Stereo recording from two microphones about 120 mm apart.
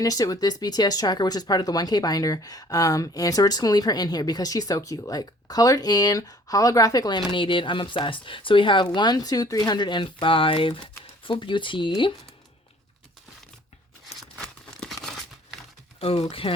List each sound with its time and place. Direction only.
0.0 s speech: 30° left (ahead or behind)
7.3 s speech: 45° left (ahead or behind)
14.1 s tearing: centre (ahead or behind)
16.0 s speech: 50° left (ahead or behind)